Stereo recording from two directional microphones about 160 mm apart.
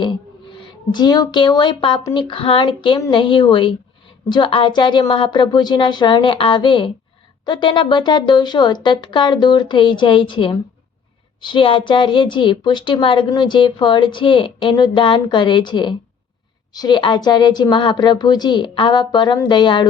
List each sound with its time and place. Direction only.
0.5 s a woman's voice: 30° left (ahead or behind)